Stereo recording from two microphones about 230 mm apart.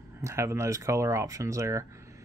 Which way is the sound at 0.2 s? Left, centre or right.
Centre.